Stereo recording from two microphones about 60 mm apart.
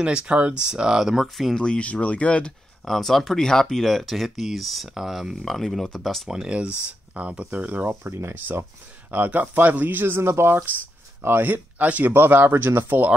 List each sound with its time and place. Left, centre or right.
0.0 s speech: centre
1.6 s speech: centre
2.8 s speech: centre
6.2 s speech: centre; by 7.9 s right
7.9 s speech: right
9.1 s speech: right
12.1 s speech: right